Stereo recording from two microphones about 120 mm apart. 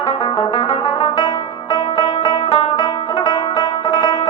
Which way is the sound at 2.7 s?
40° left (ahead or behind).